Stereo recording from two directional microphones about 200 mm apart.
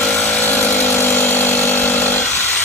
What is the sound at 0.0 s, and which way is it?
Power tool, 5° left (ahead or behind).